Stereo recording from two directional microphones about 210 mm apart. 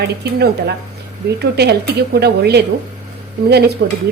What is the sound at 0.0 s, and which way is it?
Speech, 50° right (ahead or behind).